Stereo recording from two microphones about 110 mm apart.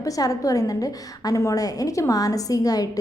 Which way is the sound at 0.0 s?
30° left (ahead or behind).